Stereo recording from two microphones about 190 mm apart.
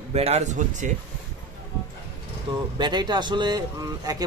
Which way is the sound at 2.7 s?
25° right (ahead or behind).